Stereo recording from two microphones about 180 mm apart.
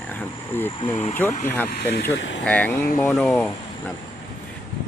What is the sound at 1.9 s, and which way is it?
Speech, 65° left (ahead or behind).